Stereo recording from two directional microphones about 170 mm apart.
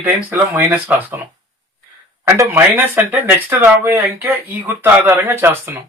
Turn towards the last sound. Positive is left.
turn(degrees=-10)  # may be behind; listen again after turning